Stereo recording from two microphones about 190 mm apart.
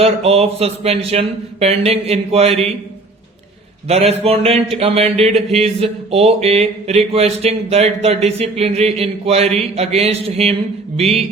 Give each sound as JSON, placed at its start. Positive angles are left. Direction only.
{"t": 0.0, "sound": "speech", "side_deg": -30}
{"t": 3.8, "sound": "speech", "side_deg": -30}